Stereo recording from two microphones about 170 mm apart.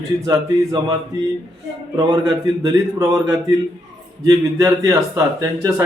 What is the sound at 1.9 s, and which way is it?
A man's voice, 20° right (ahead or behind).